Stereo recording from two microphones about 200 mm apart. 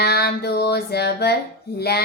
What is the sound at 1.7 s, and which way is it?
Speech, 55° left (ahead or behind).